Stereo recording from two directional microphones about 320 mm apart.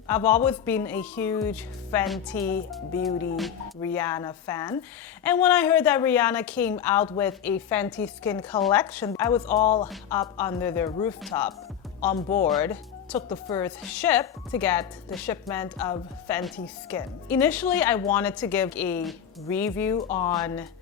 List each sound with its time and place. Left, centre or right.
0.1 s speech: centre
9.6 s speech: left
9.9 s speech: centre